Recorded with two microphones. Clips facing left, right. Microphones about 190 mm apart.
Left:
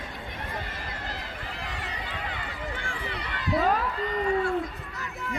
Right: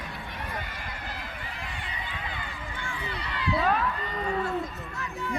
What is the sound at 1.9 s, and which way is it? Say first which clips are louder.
Run: left 2 dB; 75° left (ahead or behind).